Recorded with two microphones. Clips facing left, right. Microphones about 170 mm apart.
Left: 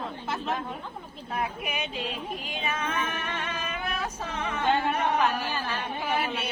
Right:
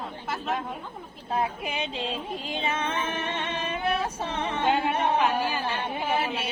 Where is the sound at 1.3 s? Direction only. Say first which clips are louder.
Right 3 dB; 25° right (ahead or behind).